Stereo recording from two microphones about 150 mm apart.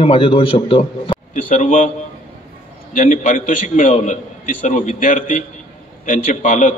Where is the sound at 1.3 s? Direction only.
55° left (ahead or behind).